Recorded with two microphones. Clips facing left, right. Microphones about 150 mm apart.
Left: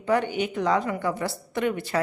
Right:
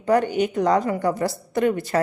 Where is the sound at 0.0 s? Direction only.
40° right (ahead or behind).